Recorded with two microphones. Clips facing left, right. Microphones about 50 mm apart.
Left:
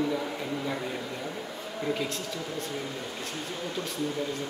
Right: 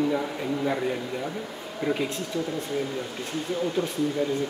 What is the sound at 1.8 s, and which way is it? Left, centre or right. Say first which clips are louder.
Speech: right 4 dB; centre.